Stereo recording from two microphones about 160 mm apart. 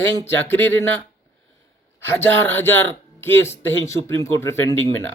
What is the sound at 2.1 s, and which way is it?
Speech, 15° left (ahead or behind).